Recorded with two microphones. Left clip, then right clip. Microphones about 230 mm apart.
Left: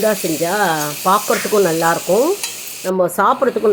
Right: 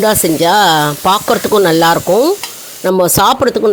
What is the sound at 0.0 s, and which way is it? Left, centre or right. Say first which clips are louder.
Speech: right 6 dB; right.